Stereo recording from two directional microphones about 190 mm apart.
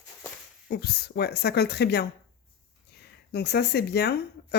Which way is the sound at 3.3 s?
60° left (ahead or behind).